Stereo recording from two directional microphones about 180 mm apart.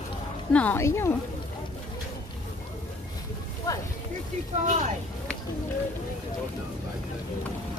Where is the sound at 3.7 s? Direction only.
20° left (ahead or behind).